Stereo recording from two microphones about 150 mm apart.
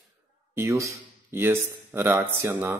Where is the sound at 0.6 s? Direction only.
20° right (ahead or behind).